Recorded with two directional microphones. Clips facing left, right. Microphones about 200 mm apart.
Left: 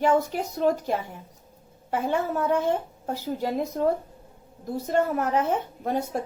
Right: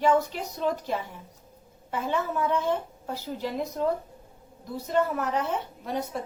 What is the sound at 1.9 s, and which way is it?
A woman's voice, 45° left (ahead or behind).